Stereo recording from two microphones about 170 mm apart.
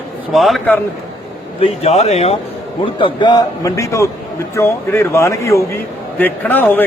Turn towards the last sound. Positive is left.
turn(degrees=10)  # may be behind; listen again after turning